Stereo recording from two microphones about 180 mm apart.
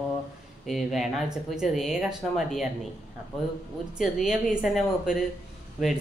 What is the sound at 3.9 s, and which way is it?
Speech, centre (ahead or behind).